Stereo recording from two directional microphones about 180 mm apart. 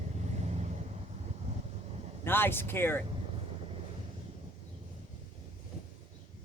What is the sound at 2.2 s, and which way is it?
Speech, 10° left (ahead or behind).